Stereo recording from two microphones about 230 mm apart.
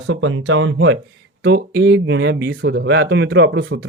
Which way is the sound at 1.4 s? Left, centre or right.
Right.